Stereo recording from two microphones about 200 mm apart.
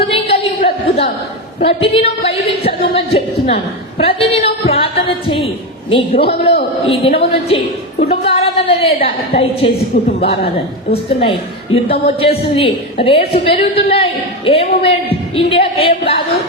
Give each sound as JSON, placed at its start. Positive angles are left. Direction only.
{"t": 0.1, "sound": "a sound", "side_deg": 30}
{"t": 6.2, "sound": "a man's voice", "side_deg": 55}
{"t": 6.8, "sound": "a woman's voice", "side_deg": 30}
{"t": 11.2, "sound": "a woman's voice", "side_deg": 30}